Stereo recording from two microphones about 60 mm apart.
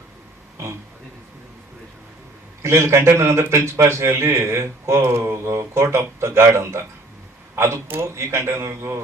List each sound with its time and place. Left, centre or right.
2.6 s a man's voice: right